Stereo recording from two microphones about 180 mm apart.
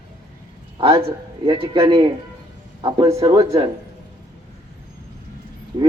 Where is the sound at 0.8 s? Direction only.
30° right (ahead or behind).